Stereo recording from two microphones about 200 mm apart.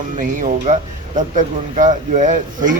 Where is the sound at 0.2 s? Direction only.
40° right (ahead or behind).